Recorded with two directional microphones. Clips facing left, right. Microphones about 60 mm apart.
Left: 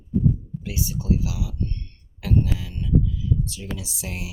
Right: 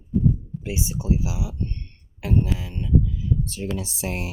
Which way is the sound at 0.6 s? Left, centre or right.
Right.